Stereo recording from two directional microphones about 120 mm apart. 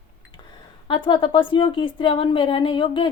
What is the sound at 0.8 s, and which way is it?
Speech, 45° left (ahead or behind).